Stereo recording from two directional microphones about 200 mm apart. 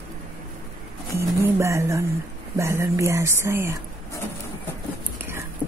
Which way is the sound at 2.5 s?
15° right (ahead or behind).